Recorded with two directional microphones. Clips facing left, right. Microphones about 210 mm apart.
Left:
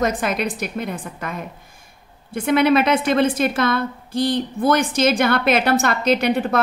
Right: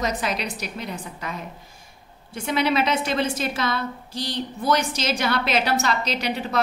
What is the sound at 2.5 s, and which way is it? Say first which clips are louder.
A woman's voice: left 6 dB; 55° left (ahead or behind).